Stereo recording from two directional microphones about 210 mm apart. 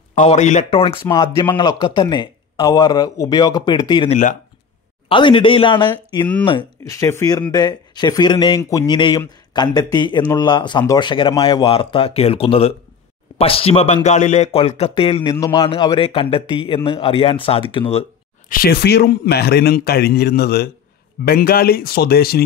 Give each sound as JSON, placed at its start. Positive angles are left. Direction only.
{"t": 0.1, "sound": "speech", "side_deg": 35}
{"t": 1.0, "sound": "speech", "side_deg": 15}
{"t": 18.5, "sound": "a man's voice", "side_deg": 45}